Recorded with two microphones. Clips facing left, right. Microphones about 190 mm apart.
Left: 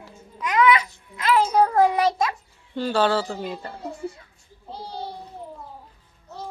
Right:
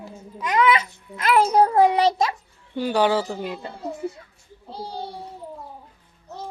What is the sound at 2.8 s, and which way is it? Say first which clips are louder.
Speech: right 1 dB; 15° right (ahead or behind).